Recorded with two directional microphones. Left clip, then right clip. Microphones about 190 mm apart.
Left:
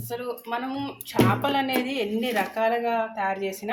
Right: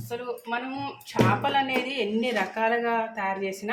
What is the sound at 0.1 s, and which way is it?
Speech, 25° left (ahead or behind).